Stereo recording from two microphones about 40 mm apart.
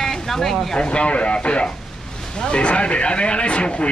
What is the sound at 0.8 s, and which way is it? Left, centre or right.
Speech, left.